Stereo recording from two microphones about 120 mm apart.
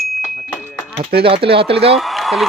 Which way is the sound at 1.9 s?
Centre (ahead or behind).